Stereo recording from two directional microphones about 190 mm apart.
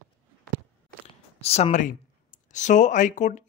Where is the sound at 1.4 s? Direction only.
35° left (ahead or behind).